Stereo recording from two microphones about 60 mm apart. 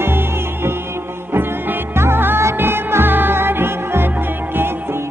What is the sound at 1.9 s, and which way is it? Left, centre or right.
Music, right.